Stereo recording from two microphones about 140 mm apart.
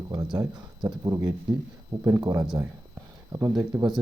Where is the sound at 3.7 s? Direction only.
20° right (ahead or behind).